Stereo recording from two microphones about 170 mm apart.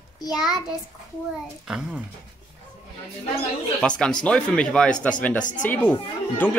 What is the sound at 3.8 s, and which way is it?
A woman's voice, 5° left (ahead or behind).